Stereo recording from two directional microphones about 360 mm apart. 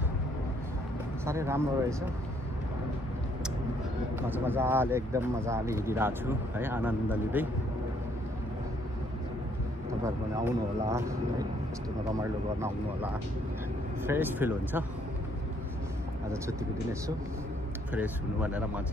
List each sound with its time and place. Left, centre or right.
1.2 s speech: centre
4.2 s speech: centre
10.0 s speech: centre
14.0 s speech: centre
17.9 s speech: centre